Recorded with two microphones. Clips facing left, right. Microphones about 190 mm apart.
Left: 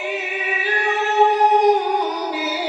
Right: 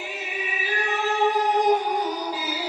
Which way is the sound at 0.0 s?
65° left (ahead or behind).